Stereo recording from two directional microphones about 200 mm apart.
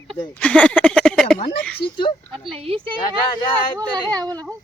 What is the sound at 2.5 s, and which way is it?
Speech, 25° right (ahead or behind).